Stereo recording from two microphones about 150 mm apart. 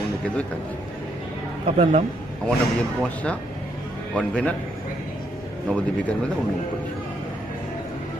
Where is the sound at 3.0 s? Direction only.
10° left (ahead or behind).